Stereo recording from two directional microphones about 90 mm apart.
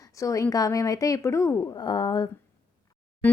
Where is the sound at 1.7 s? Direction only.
55° left (ahead or behind).